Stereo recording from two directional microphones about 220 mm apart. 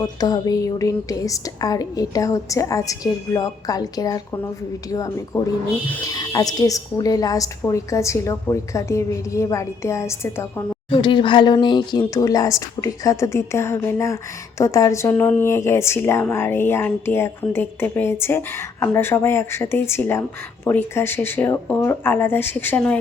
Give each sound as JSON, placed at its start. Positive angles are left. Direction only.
{"t": 0.0, "sound": "speech", "side_deg": 20}